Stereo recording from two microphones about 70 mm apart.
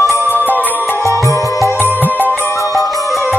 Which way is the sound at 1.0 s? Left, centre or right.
Right.